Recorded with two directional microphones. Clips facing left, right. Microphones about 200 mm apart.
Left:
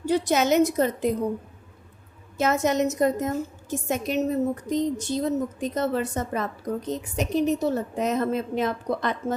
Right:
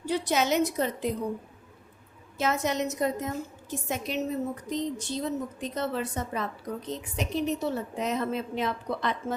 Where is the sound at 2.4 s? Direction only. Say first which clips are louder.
Left 5 dB; 45° left (ahead or behind).